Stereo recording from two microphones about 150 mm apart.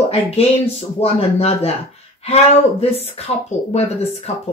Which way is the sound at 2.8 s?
45° left (ahead or behind).